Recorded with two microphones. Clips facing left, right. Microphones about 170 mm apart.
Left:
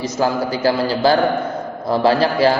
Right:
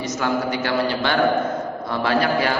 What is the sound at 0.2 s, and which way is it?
A man's voice, 35° left (ahead or behind).